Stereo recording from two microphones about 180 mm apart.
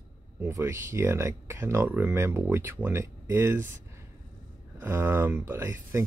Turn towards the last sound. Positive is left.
turn(degrees=-15)  # may be behind; listen again after turning